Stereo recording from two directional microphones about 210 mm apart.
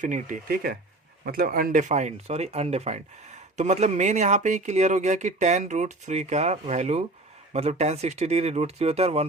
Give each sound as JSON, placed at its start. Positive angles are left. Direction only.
{"t": 0.0, "sound": "speech", "side_deg": -35}